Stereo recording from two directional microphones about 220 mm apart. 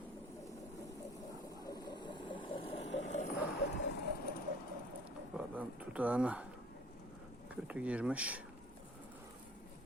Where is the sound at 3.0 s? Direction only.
35° left (ahead or behind).